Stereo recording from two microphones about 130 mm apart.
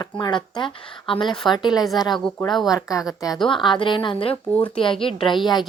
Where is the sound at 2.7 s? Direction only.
25° left (ahead or behind).